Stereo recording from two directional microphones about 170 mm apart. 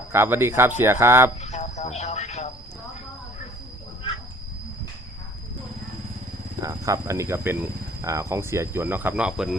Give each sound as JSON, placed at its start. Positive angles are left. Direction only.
{"t": 0.1, "sound": "speech", "side_deg": -15}
{"t": 1.4, "sound": "a sound", "side_deg": 40}
{"t": 6.6, "sound": "speech", "side_deg": -20}